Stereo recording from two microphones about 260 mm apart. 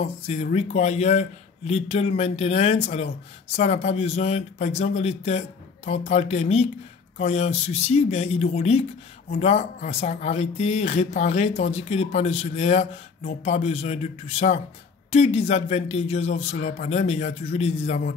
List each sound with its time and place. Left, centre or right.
0.0 s speech: left